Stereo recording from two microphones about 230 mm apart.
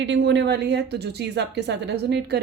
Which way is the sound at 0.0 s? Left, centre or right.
Right.